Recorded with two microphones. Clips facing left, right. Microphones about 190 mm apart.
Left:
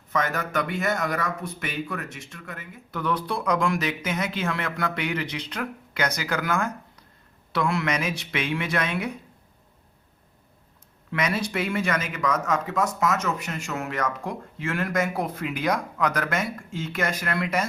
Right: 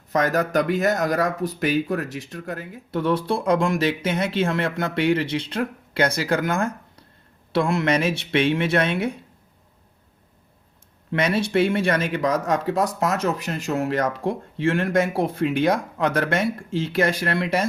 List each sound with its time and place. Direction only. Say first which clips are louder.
0.1 s speech: right 6 dB; 40° right (ahead or behind)
11.1 s speech: right 6 dB; 30° right (ahead or behind)